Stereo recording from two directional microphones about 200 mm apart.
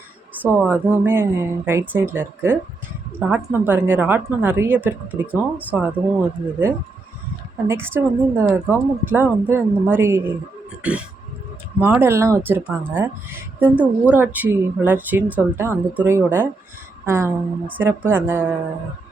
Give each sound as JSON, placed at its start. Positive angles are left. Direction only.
{"t": 0.4, "sound": "a woman's voice", "side_deg": -10}
{"t": 11.8, "sound": "a woman's voice", "side_deg": -10}